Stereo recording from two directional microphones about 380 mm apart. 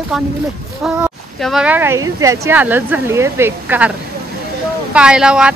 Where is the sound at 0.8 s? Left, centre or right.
Centre.